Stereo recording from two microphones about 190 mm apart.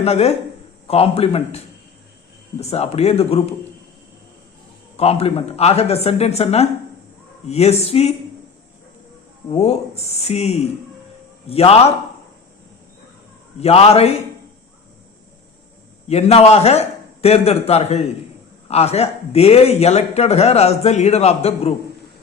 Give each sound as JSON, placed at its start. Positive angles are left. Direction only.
{"t": 0.0, "sound": "speech", "side_deg": 35}
{"t": 4.9, "sound": "speech", "side_deg": 30}
{"t": 9.5, "sound": "speech", "side_deg": 35}
{"t": 13.6, "sound": "speech", "side_deg": 30}
{"t": 16.0, "sound": "speech", "side_deg": 35}